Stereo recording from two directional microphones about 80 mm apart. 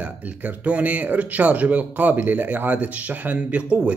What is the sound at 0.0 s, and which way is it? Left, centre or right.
Speech, centre.